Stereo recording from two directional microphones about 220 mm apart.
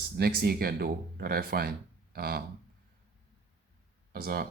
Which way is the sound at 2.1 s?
45° right (ahead or behind).